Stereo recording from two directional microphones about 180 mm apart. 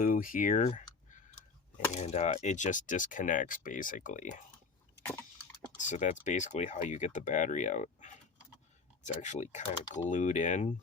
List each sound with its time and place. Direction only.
0.0 s speech: 50° left (ahead or behind)
1.9 s speech: 40° left (ahead or behind)
5.0 s a sound: 10° left (ahead or behind)
5.9 s speech: 40° left (ahead or behind)